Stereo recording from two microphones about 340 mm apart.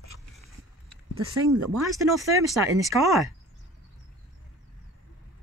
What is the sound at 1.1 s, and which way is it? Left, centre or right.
Speech, right.